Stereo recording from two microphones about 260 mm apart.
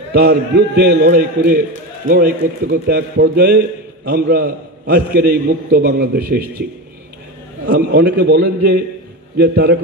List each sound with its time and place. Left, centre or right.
0.1 s a man's voice: right
7.9 s a man's voice: right